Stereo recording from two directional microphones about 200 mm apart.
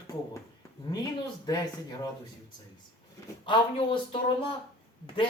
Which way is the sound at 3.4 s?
25° left (ahead or behind).